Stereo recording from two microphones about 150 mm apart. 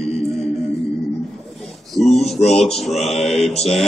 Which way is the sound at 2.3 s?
45° left (ahead or behind).